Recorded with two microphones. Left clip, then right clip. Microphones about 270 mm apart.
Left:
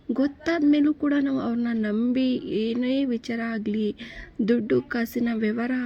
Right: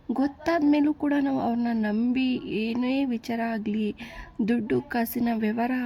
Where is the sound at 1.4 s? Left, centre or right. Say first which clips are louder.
Right 1 dB; right.